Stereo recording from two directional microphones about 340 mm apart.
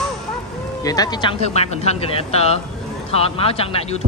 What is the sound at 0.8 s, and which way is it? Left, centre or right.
Speech, centre.